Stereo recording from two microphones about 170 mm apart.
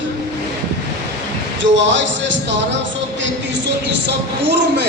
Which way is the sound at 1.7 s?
90° right.